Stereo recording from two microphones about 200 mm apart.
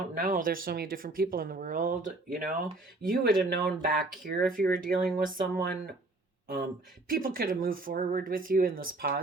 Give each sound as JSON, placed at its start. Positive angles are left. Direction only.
{"t": 0.1, "sound": "speech", "side_deg": -40}
{"t": 7.1, "sound": "speech", "side_deg": -45}